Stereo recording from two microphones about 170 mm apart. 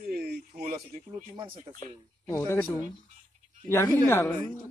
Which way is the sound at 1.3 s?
30° right (ahead or behind).